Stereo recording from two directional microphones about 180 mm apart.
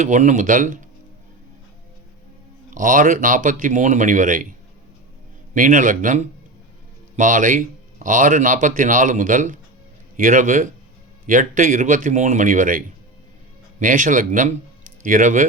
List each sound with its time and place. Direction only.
0.0 s speech: 45° right (ahead or behind)
2.6 s speech: 45° right (ahead or behind)
5.5 s speech: 45° right (ahead or behind)